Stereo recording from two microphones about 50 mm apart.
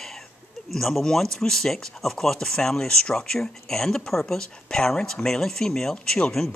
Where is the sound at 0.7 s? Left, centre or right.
Centre.